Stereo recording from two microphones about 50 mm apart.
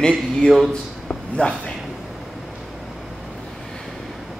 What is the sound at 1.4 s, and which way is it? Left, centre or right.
Speech, left.